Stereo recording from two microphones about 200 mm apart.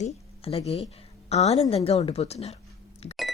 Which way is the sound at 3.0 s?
30° left (ahead or behind).